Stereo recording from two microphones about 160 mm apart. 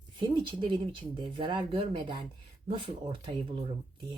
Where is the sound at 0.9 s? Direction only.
30° right (ahead or behind).